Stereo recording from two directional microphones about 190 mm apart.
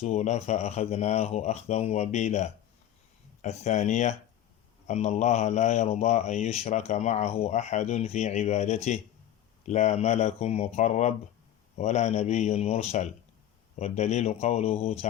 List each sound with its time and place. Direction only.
0.0 s speech: 35° left (ahead or behind)